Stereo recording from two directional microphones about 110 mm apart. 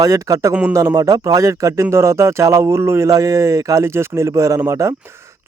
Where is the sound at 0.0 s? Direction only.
30° right (ahead or behind).